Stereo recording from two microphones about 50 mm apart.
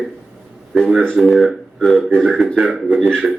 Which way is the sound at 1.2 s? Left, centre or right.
Centre.